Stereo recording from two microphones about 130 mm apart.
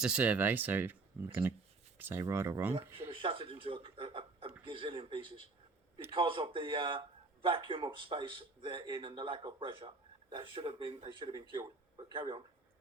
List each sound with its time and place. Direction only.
0.0 s speech: 10° right (ahead or behind)
3.1 s chuckle: 45° right (ahead or behind)
4.6 s speech: 40° right (ahead or behind)